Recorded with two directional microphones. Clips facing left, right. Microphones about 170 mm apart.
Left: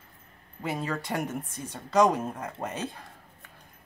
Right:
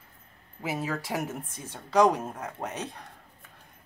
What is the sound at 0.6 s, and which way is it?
Speech, 5° right (ahead or behind).